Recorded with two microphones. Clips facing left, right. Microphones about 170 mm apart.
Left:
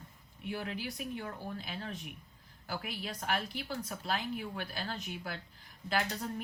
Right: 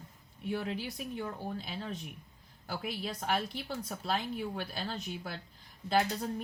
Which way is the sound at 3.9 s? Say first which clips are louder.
Right 4 dB; 30° right (ahead or behind).